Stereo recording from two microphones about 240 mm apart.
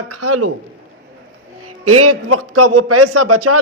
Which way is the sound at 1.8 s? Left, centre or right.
Right.